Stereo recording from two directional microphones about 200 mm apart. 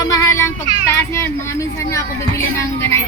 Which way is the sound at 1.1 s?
15° left (ahead or behind).